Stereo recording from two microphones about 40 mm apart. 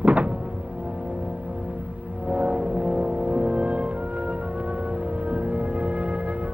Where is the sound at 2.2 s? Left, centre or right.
Right.